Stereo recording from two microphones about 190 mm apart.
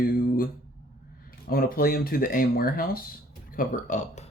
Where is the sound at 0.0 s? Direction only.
50° left (ahead or behind).